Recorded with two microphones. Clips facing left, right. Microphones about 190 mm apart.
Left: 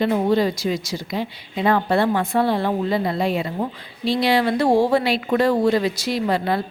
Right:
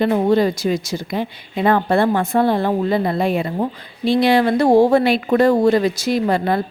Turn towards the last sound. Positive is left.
turn(degrees=-50)  # may be behind; listen again after turning